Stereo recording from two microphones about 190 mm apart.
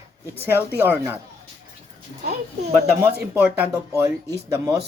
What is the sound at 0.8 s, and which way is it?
Speech, 10° right (ahead or behind).